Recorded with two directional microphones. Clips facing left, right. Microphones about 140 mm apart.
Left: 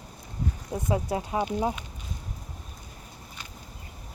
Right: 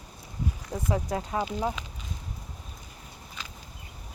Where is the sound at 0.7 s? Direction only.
15° left (ahead or behind).